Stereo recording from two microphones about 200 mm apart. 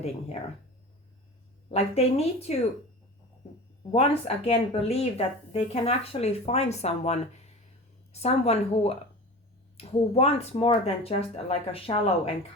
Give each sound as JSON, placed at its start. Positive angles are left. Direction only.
{"t": 1.7, "sound": "speech", "side_deg": 30}
{"t": 3.9, "sound": "speech", "side_deg": 30}